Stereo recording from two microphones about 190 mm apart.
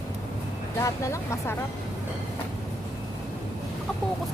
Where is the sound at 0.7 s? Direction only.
15° left (ahead or behind).